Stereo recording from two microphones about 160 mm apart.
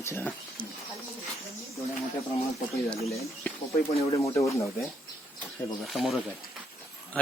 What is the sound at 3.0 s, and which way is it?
Speech, 40° left (ahead or behind).